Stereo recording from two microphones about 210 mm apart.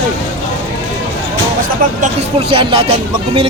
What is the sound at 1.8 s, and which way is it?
Speech, 40° right (ahead or behind).